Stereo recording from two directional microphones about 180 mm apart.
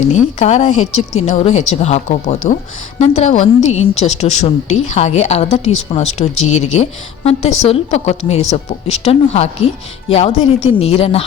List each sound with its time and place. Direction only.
0.1 s a woman's voice: 40° left (ahead or behind)